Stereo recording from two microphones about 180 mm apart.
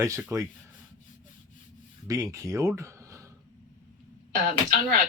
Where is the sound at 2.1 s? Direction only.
20° right (ahead or behind).